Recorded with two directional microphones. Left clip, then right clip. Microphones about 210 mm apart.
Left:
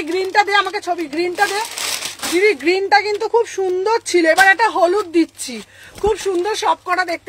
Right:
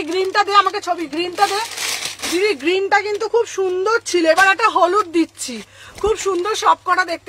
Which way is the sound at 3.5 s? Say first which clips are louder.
Even; 15° right (ahead or behind).